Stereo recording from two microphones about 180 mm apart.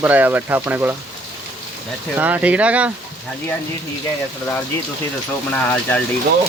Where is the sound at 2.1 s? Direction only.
10° right (ahead or behind).